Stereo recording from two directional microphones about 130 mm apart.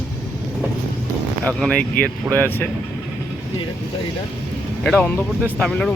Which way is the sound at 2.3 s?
10° right (ahead or behind).